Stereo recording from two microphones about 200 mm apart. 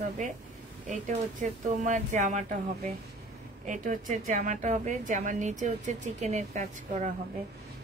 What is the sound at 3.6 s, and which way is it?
Speech, 40° right (ahead or behind).